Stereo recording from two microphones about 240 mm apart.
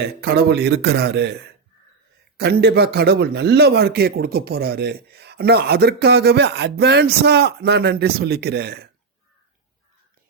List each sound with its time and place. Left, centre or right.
0.0 s a man's voice: right
2.4 s a man's voice: right